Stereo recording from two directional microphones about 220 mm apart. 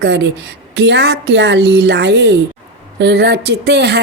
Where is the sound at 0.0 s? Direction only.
55° right (ahead or behind).